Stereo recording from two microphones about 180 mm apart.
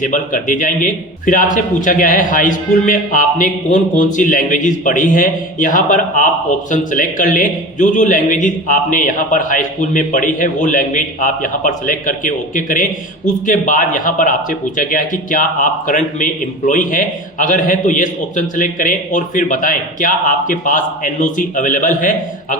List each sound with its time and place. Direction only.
0.0 s a man's voice: 45° left (ahead or behind)